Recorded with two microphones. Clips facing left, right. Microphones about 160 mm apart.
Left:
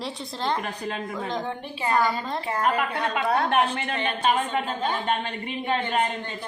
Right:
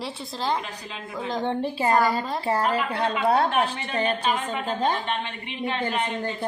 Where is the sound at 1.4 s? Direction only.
35° right (ahead or behind).